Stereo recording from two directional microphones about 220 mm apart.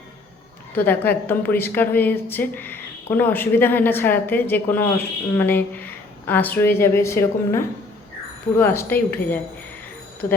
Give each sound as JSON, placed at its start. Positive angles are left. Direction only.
{"t": 0.8, "sound": "a woman's voice", "side_deg": 10}